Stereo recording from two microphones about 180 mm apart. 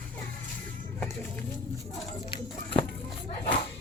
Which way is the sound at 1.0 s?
10° left (ahead or behind).